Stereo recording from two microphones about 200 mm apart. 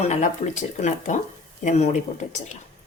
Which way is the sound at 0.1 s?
35° left (ahead or behind).